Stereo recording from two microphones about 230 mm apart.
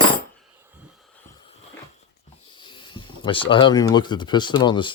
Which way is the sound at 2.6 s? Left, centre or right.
Left.